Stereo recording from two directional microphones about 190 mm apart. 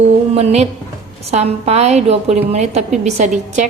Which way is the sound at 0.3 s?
35° right (ahead or behind).